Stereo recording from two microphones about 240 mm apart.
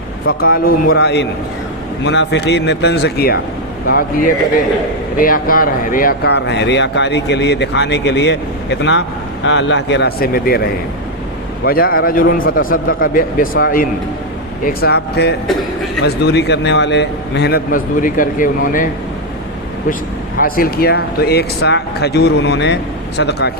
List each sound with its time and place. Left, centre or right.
0.3 s a man's voice: left
11.6 s a man's voice: left
20.4 s speech: left